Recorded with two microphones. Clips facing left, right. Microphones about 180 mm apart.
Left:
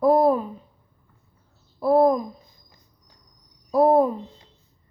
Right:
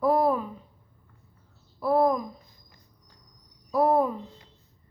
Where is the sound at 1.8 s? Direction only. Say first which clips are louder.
Left 5 dB; 35° left (ahead or behind).